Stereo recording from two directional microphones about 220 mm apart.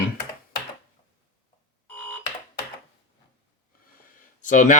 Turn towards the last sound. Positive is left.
turn(degrees=35)  # may be behind; listen again after turning